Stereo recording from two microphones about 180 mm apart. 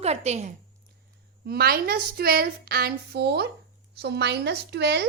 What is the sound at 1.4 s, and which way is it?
A woman's voice, 60° right (ahead or behind).